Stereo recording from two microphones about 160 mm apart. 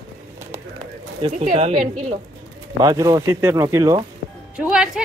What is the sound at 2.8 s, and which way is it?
A woman's voice, 25° right (ahead or behind).